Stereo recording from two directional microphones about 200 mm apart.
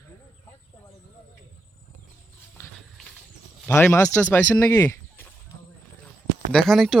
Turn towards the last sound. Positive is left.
turn(degrees=0)  # may be behind; listen again after turning